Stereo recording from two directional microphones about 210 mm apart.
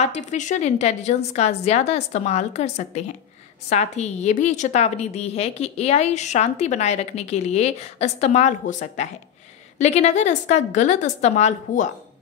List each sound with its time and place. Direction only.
0.0 s a woman's voice: 35° left (ahead or behind)